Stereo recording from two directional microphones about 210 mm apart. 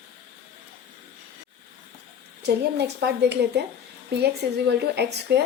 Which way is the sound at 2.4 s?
55° right (ahead or behind).